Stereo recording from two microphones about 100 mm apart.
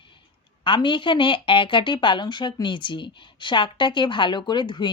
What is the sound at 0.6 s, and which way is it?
A woman's voice, 55° left (ahead or behind).